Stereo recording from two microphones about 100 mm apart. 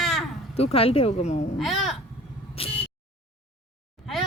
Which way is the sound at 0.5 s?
80° left.